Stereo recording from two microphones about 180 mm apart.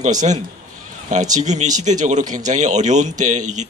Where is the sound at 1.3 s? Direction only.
40° right (ahead or behind).